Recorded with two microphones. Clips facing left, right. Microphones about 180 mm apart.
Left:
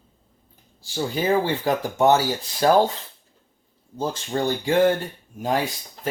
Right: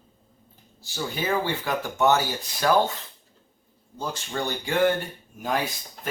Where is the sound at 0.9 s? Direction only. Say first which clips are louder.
Left 5 dB; 35° left (ahead or behind).